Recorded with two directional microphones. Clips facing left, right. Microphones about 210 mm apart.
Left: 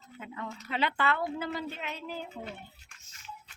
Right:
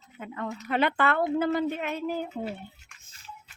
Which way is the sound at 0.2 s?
55° right (ahead or behind).